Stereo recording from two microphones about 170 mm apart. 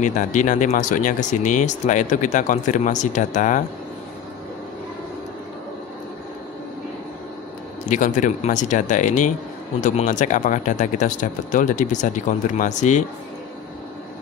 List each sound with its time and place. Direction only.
0.0 s speech: 50° left (ahead or behind)
7.8 s speech: 50° left (ahead or behind)